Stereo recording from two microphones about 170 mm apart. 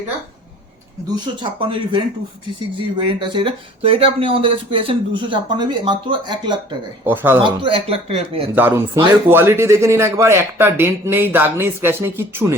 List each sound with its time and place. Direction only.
1.1 s speech: 30° right (ahead or behind)
7.0 s speech: 10° right (ahead or behind)
7.3 s speech: 30° right (ahead or behind)
8.5 s speech: 10° right (ahead or behind)